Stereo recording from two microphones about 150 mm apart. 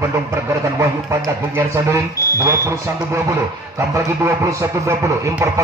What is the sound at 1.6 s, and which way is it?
Speech, 20° right (ahead or behind).